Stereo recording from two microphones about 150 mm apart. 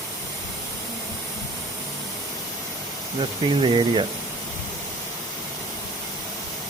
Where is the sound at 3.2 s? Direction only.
35° right (ahead or behind).